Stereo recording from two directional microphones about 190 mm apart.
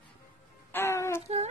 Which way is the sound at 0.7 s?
15° left (ahead or behind).